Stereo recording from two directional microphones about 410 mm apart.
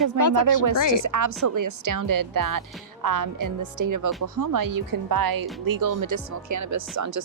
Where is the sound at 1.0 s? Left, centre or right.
Right.